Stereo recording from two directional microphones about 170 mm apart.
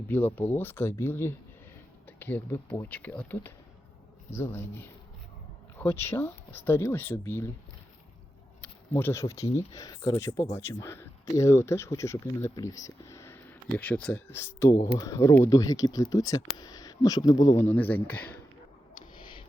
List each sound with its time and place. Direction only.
0.1 s speech: 10° left (ahead or behind)
8.6 s speech: 15° left (ahead or behind)
19.1 s a sound: 30° left (ahead or behind)